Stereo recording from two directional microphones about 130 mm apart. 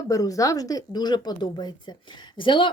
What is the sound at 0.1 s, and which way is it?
Speech, 25° left (ahead or behind).